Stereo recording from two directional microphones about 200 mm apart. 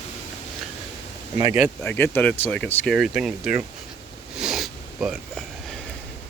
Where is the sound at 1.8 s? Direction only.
10° left (ahead or behind).